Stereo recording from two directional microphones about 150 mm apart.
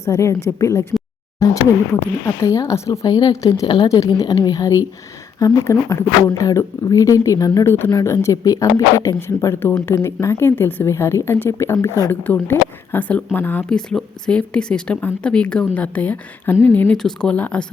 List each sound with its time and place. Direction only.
0.0 s speech: 20° left (ahead or behind)